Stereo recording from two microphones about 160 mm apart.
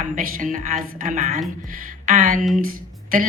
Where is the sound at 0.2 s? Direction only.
55° right (ahead or behind).